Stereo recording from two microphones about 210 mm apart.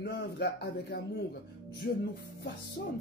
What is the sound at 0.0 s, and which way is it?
A man's voice, 55° left (ahead or behind).